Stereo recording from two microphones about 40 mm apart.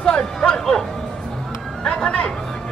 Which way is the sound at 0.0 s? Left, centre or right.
Left.